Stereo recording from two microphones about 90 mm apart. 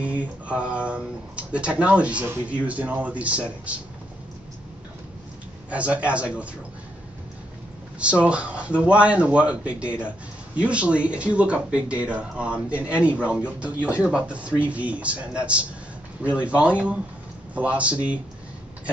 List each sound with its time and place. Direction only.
0.0 s speech: 15° right (ahead or behind)
5.7 s speech: 15° right (ahead or behind)
8.0 s speech: 15° right (ahead or behind)